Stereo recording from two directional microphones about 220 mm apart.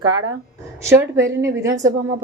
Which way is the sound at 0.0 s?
80° right.